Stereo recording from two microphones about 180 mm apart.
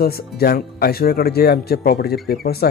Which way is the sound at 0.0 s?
60° left (ahead or behind).